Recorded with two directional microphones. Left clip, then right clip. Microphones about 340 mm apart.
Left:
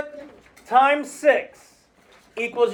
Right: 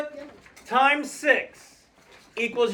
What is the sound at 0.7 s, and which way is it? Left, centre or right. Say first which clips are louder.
A man's voice: left 4 dB; centre.